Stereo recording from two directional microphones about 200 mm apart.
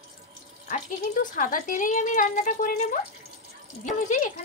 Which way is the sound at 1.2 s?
40° left (ahead or behind).